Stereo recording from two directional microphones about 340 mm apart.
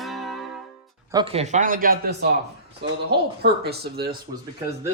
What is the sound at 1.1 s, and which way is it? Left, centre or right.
Speech, centre.